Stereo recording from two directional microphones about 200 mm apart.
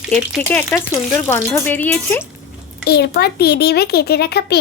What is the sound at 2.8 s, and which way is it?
Speech, 55° left (ahead or behind).